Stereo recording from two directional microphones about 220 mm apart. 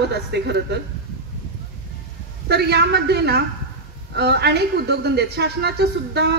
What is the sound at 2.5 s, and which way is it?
Speech, 50° right (ahead or behind).